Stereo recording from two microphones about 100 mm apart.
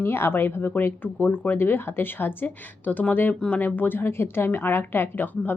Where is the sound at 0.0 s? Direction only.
25° left (ahead or behind).